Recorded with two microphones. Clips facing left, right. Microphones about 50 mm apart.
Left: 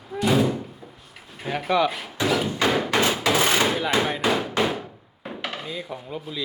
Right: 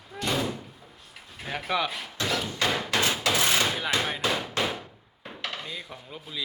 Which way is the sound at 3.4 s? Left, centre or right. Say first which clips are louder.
Left 3 dB; left.